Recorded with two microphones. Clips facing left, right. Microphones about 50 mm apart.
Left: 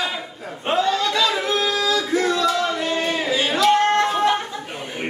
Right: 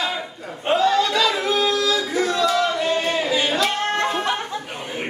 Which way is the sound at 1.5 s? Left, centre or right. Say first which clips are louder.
Right 1 dB; centre.